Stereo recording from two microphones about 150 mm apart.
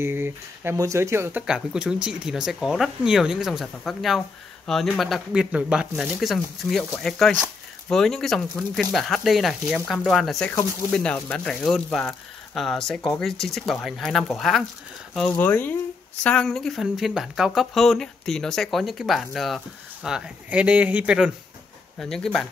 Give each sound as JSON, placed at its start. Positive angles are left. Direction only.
{"t": 0.0, "sound": "speech", "side_deg": -15}
{"t": 1.4, "sound": "speech", "side_deg": -5}